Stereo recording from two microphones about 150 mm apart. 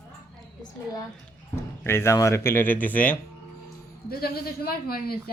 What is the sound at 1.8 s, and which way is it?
Speech, 15° left (ahead or behind).